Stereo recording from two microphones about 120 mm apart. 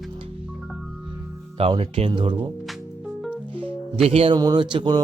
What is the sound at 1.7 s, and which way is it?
Speech, 50° right (ahead or behind).